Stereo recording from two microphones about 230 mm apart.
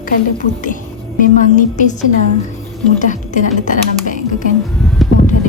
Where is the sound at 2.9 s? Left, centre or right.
Left.